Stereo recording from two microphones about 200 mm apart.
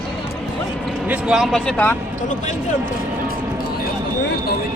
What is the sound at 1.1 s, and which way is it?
Speech, 5° right (ahead or behind).